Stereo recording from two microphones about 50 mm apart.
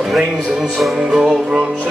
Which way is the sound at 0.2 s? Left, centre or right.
Centre.